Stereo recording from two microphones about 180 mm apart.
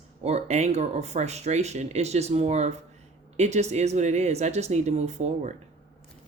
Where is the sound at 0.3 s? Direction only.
35° right (ahead or behind).